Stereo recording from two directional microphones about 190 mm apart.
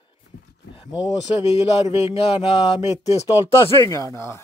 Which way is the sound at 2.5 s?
25° left (ahead or behind).